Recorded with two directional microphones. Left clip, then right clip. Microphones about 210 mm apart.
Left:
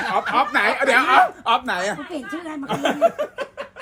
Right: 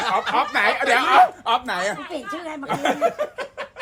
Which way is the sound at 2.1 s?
5° right (ahead or behind).